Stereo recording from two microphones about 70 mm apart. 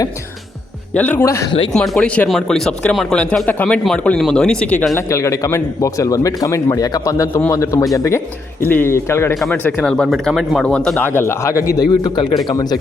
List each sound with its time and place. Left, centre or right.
0.9 s speech: left
1.2 s speech: left
1.7 s speech: centre
2.0 s speech: centre
2.3 s speech: centre
4.9 s speech: left
8.6 s speech: left
8.9 s speech: left
9.8 s speech: centre
10.2 s speech: centre
10.7 s speech: centre
10.9 s speech: left
11.8 s a man's voice: left
12.5 s speech: left